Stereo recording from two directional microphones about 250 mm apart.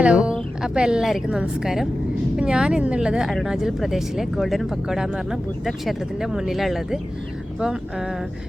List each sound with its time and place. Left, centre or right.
0.0 s a woman's voice: centre